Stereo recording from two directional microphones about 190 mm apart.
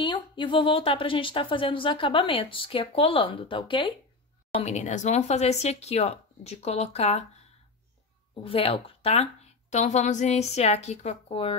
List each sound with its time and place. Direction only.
0.0 s a woman's voice: 25° left (ahead or behind)
4.6 s a woman's voice: 35° left (ahead or behind)
8.5 s a woman's voice: 30° left (ahead or behind)